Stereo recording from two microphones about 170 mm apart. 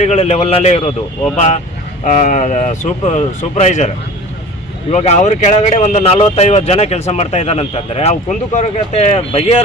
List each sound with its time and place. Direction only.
0.0 s speech: 40° left (ahead or behind)
2.0 s speech: 45° left (ahead or behind)